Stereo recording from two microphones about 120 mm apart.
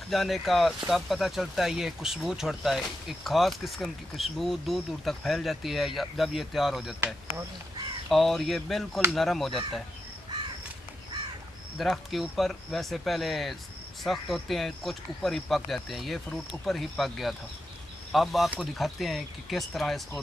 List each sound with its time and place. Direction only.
0.1 s speech: centre (ahead or behind)
8.1 s speech: centre (ahead or behind)
11.8 s speech: centre (ahead or behind)